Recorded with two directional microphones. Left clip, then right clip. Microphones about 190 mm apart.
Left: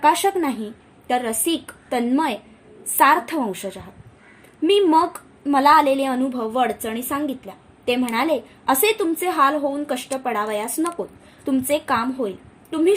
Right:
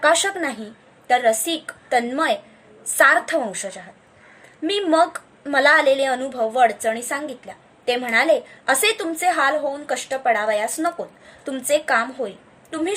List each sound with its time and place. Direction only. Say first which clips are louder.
0.0 s a woman's voice: left 1 dB; 15° left (ahead or behind)